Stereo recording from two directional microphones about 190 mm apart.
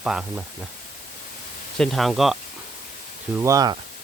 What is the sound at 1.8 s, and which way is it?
Speech, centre (ahead or behind).